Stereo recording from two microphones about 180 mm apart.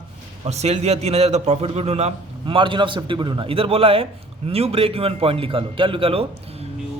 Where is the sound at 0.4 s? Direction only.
35° right (ahead or behind).